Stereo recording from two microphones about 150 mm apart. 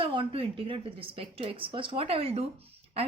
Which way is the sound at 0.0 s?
35° right (ahead or behind).